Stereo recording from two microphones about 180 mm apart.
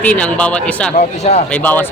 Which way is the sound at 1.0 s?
40° left (ahead or behind).